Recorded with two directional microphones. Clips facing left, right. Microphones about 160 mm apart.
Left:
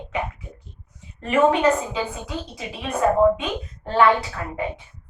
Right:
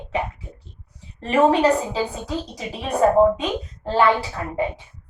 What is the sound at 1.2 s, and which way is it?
Speech, 35° right (ahead or behind).